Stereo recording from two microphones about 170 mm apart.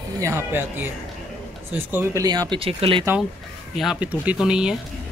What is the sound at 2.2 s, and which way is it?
Speech, 25° right (ahead or behind).